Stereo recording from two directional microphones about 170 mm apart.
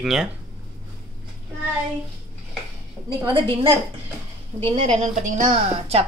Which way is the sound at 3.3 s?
30° right (ahead or behind).